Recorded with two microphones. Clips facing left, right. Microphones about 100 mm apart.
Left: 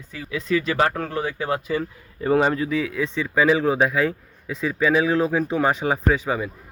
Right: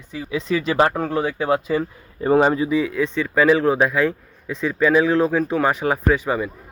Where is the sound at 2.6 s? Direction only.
5° right (ahead or behind).